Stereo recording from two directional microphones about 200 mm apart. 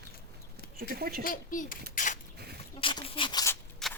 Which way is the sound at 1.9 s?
40° left (ahead or behind).